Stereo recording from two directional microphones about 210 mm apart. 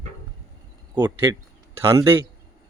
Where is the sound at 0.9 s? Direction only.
20° right (ahead or behind).